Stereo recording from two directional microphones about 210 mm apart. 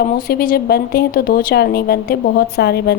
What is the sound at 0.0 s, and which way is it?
A woman's voice, 45° left (ahead or behind).